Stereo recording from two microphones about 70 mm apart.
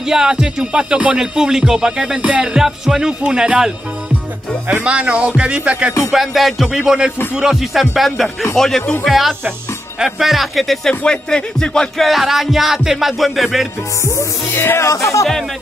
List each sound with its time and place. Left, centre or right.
0.0 s music: centre
4.8 s music: centre
6.1 s music: centre
12.0 s music: centre
14.5 s music: left
14.9 s music: left